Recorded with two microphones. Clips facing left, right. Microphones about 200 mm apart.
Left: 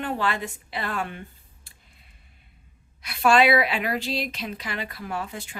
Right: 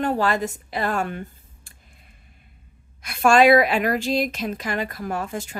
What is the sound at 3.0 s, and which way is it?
Speech, 45° right (ahead or behind).